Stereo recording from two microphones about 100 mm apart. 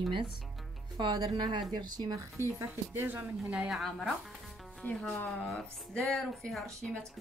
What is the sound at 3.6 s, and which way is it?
A woman's voice, centre (ahead or behind).